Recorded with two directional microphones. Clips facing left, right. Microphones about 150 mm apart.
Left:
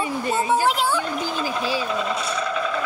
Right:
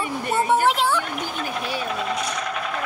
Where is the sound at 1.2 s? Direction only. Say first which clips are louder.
Left 3 dB; 90° left.